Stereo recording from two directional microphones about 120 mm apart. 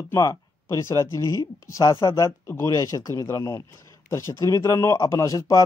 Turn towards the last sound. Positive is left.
turn(degrees=25)  # may be behind; listen again after turning